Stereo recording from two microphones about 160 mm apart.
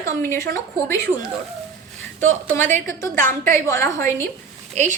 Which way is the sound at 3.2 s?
60° right (ahead or behind).